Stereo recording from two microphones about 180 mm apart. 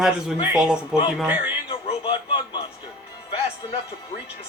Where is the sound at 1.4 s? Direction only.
25° left (ahead or behind).